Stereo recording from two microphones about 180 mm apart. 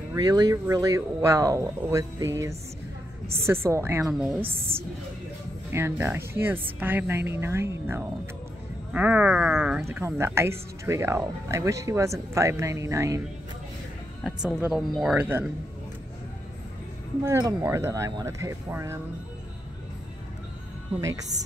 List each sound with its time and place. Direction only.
0.1 s speech: 20° right (ahead or behind)
3.6 s a woman's voice: 15° right (ahead or behind)
5.7 s speech: 15° right (ahead or behind)
14.2 s a woman's voice: centre (ahead or behind)
17.2 s speech: 15° right (ahead or behind)